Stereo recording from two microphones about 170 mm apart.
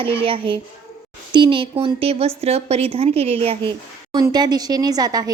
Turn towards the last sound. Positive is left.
turn(degrees=-20)  # may be behind; listen again after turning